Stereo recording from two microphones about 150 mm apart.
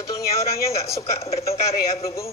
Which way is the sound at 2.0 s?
20° left (ahead or behind).